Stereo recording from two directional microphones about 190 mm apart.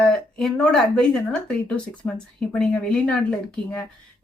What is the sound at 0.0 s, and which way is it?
Speech, 5° left (ahead or behind).